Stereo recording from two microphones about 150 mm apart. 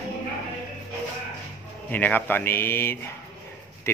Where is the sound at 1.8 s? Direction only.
10° left (ahead or behind).